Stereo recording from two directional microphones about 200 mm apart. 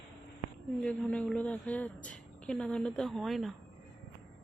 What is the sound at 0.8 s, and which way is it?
A woman's voice, 5° left (ahead or behind).